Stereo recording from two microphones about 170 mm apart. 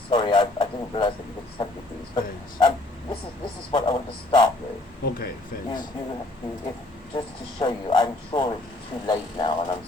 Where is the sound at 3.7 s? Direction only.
25° left (ahead or behind).